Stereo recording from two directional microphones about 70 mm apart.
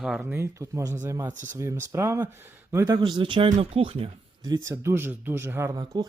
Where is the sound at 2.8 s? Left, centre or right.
Right.